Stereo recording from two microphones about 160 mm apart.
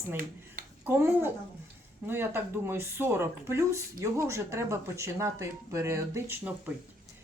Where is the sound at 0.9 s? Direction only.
15° right (ahead or behind).